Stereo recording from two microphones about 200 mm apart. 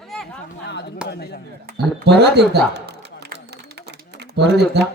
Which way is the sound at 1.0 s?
55° left (ahead or behind).